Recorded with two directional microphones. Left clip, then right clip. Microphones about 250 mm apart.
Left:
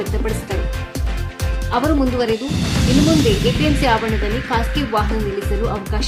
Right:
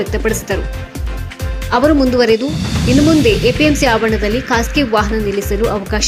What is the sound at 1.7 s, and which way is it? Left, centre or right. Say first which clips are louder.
Speech: right 6 dB; centre.